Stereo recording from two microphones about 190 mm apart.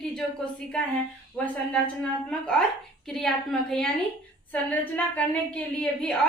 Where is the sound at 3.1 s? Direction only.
Centre (ahead or behind).